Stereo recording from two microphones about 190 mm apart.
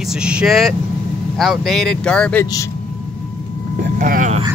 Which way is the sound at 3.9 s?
45° right (ahead or behind).